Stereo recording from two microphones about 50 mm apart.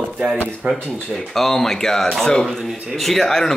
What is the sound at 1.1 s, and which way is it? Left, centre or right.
Speech, centre.